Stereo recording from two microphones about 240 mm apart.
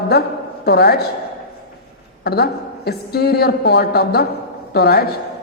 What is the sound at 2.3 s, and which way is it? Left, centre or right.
A woman's voice, left.